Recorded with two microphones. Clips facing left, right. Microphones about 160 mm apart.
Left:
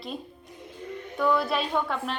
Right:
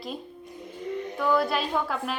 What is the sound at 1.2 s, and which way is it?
Speech, centre (ahead or behind).